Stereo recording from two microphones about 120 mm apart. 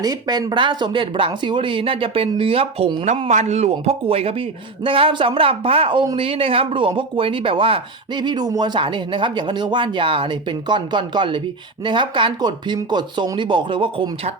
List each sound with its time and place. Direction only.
0.0 s speech: 35° right (ahead or behind); by 2.9 s 55° right (ahead or behind)
3.2 s speech: 70° right (ahead or behind); by 14.1 s 45° right (ahead or behind)